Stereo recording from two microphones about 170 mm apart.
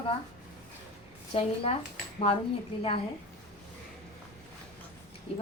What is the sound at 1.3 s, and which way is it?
Speech, 30° left (ahead or behind).